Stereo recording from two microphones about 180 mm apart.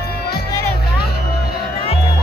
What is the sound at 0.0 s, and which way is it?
Music, 60° left (ahead or behind).